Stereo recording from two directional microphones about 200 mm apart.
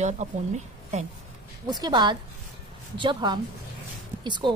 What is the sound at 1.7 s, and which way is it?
Speech, 20° right (ahead or behind).